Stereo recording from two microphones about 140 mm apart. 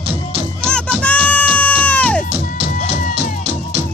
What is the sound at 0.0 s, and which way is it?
Music, 45° right (ahead or behind).